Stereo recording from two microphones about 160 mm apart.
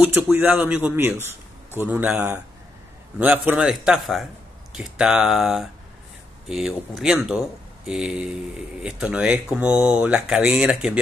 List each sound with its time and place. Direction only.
0.0 s speech: 10° right (ahead or behind)